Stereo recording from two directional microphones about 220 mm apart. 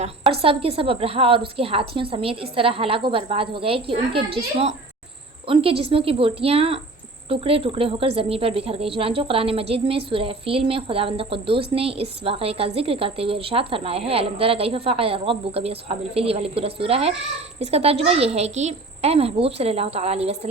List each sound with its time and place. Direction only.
0.4 s a woman's voice: 25° right (ahead or behind)